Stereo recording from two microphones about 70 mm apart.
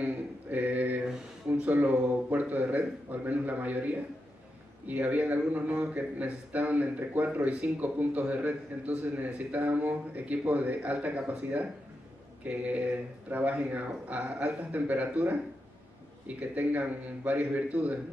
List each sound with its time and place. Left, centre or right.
0.0 s mantra: right
1.5 s a sound: right
2.3 s a man's voice: right
16.3 s a man's voice: right